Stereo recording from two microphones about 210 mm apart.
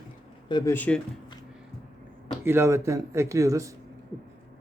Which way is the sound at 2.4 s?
10° right (ahead or behind).